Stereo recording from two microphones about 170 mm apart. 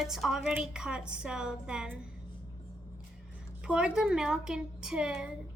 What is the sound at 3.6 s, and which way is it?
A woman's voice, 5° right (ahead or behind).